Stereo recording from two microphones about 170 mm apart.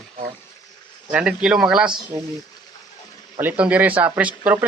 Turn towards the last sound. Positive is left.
turn(degrees=-10)  # may be behind; listen again after turning